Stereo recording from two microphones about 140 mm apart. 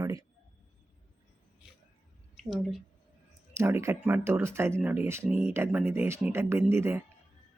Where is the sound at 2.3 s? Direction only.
Centre (ahead or behind).